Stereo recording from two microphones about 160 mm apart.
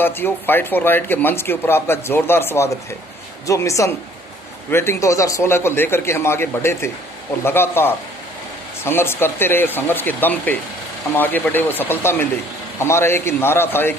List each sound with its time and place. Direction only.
0.0 s a woman's voice: 15° left (ahead or behind)